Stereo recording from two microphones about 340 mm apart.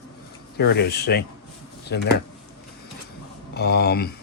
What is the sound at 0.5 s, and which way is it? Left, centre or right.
Speech, left.